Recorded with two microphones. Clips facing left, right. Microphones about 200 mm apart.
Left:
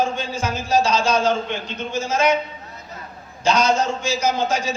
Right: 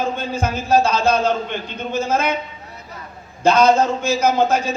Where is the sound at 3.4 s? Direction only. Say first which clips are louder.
Right 5 dB; 55° right (ahead or behind).